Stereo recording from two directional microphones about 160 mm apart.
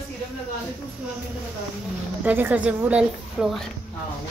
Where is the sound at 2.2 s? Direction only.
10° right (ahead or behind).